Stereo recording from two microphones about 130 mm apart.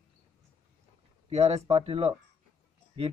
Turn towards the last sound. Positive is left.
turn(degrees=-50)  # may be behind; listen again after turning